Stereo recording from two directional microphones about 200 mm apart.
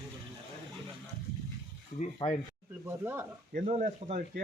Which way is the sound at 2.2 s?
25° left (ahead or behind).